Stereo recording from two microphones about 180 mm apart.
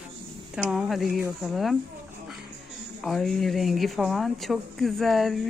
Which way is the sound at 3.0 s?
Centre (ahead or behind).